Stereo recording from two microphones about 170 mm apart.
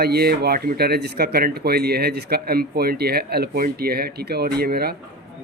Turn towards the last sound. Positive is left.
turn(degrees=-65)  # may be behind; listen again after turning